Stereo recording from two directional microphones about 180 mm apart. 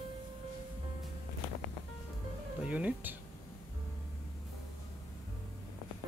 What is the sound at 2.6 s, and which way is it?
Speech, 5° right (ahead or behind).